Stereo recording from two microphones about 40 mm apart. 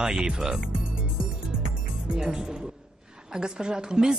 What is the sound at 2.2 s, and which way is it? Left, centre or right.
Speech, centre.